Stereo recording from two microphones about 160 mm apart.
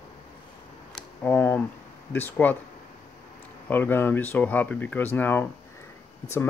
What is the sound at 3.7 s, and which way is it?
Speech, 15° left (ahead or behind).